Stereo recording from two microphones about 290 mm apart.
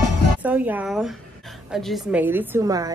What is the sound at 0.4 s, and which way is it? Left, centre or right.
A woman's voice, centre.